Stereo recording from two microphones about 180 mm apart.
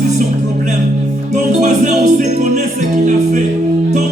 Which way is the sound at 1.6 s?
40° right (ahead or behind).